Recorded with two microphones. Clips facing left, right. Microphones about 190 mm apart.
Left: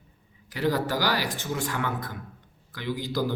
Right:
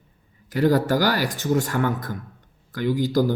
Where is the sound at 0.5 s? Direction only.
45° right (ahead or behind).